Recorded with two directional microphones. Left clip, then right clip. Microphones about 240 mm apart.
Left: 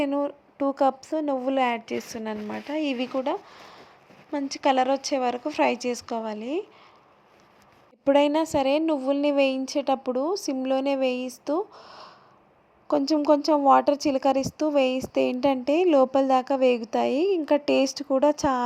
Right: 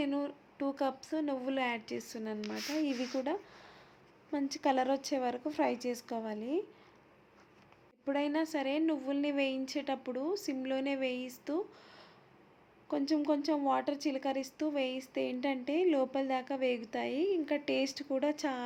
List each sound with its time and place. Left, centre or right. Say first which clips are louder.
0.0 s a woman's voice: left 10 dB; left
8.0 s a woman's voice: left 13 dB; left